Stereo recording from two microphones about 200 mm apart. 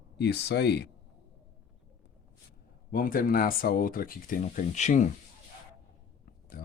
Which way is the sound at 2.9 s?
45° left (ahead or behind).